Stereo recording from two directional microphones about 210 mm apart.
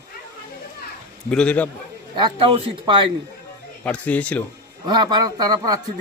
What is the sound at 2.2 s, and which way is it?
Speech, 20° right (ahead or behind).